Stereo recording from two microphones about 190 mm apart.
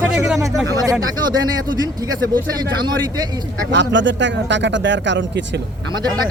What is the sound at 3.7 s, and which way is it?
Speech, 70° right (ahead or behind).